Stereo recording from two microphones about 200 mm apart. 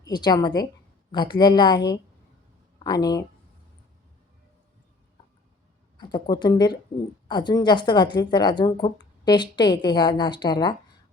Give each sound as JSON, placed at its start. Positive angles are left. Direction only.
{"t": 0.0, "sound": "speech", "side_deg": 20}
{"t": 6.0, "sound": "speech", "side_deg": 20}